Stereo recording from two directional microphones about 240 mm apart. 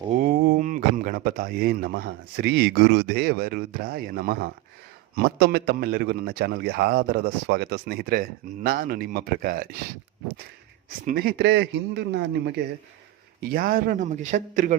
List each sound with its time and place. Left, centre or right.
0.1 s a man's voice: right
11.0 s a man's voice: right